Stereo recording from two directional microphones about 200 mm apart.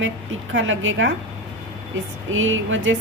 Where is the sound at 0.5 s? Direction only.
75° right (ahead or behind).